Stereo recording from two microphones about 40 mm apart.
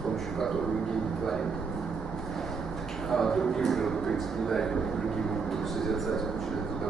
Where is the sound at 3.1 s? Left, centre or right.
Centre.